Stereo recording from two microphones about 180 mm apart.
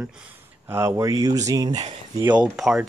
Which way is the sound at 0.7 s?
15° right (ahead or behind).